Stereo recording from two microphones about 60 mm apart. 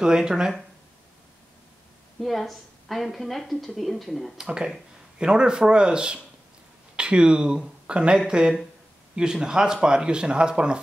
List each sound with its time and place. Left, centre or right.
0.0 s speech: centre
2.1 s a woman's voice: centre
4.4 s speech: centre